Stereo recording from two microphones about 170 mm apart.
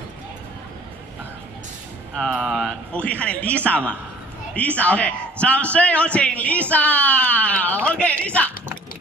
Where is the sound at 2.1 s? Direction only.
5° left (ahead or behind).